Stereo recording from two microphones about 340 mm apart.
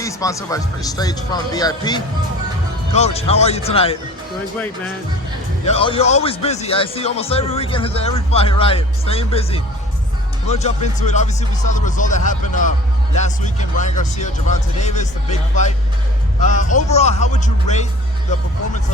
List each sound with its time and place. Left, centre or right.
0.0 s speech: centre
5.6 s speech: centre